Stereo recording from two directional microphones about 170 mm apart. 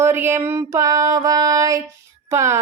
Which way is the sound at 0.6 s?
20° right (ahead or behind).